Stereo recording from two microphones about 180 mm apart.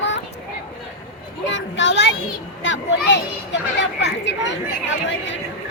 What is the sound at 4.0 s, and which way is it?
Chatter, 80° left.